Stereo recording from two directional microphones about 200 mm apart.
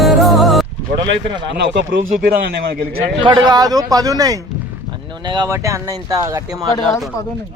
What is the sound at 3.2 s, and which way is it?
A man's voice, 20° right (ahead or behind).